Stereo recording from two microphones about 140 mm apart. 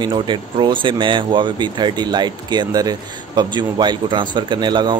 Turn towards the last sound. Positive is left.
turn(degrees=-30)  # may be behind; listen again after turning